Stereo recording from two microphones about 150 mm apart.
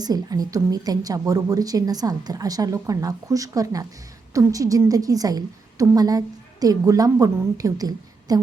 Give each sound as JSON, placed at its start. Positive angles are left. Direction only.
{"t": 0.0, "sound": "a woman's voice", "side_deg": -25}